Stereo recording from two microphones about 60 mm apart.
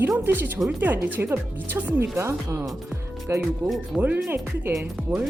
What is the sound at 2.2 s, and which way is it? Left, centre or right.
Speech, right.